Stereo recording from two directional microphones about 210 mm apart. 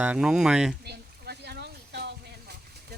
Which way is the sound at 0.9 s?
50° right (ahead or behind).